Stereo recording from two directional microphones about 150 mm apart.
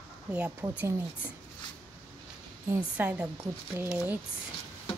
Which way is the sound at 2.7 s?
10° right (ahead or behind).